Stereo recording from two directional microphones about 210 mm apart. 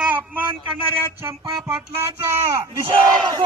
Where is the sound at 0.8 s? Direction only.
25° right (ahead or behind).